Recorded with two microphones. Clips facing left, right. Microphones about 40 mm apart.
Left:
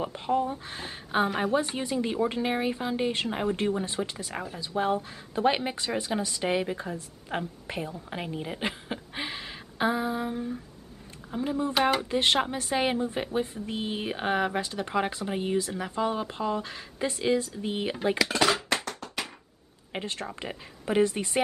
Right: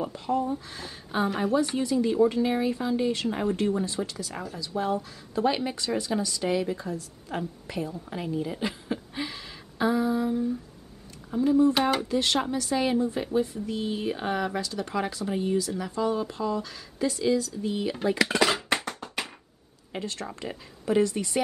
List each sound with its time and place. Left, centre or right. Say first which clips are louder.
0.0 s a woman's voice: even; left
18.9 s tap: right 1 dB; centre
19.9 s speech: even; left